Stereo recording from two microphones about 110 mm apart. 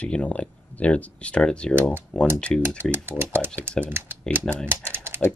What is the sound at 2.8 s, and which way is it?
Speech, 20° right (ahead or behind).